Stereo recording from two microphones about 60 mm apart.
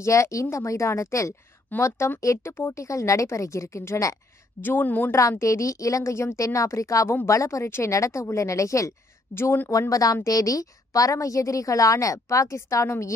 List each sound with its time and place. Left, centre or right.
0.0 s a woman's voice: left
2.8 s a woman's voice: left
4.6 s speech: left
5.4 s a woman's voice: left
9.3 s speech: left
9.7 s a woman's voice: left